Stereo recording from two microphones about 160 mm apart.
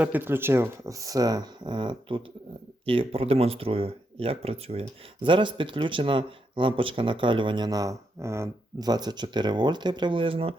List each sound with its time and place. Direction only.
0.0 s speech: 10° right (ahead or behind); by 10.5 s 35° right (ahead or behind)